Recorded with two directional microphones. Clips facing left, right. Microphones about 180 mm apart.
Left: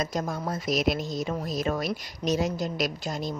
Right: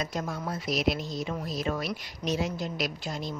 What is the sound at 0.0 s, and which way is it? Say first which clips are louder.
Speech: left 3 dB; 40° left (ahead or behind).